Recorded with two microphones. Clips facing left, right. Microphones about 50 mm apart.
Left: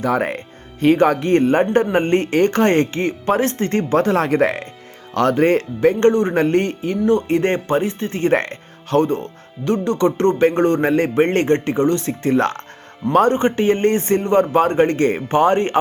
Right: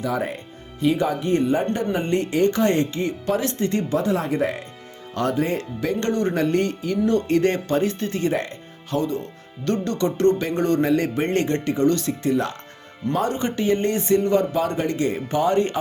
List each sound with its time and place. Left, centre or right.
0.0 s speech: left
5.1 s speech: left
5.8 s speech: left
8.3 s speech: left
9.6 s speech: left
12.2 s speech: left
13.3 s speech: left